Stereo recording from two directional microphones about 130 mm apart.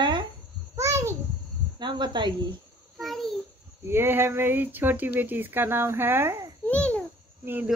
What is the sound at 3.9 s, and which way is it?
Speech, 15° right (ahead or behind).